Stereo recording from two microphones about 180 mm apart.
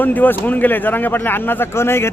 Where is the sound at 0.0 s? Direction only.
10° left (ahead or behind).